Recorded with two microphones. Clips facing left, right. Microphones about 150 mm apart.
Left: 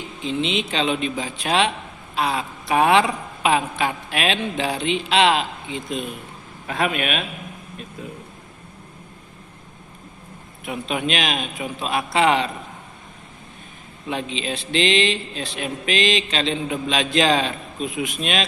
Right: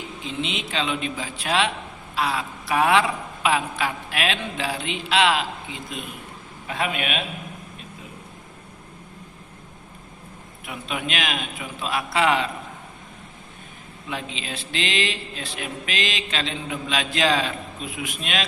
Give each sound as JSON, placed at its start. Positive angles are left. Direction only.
{"t": 0.3, "sound": "speech", "side_deg": 20}
{"t": 6.7, "sound": "a man's voice", "side_deg": 50}
{"t": 10.7, "sound": "speech", "side_deg": 25}
{"t": 14.1, "sound": "speech", "side_deg": 20}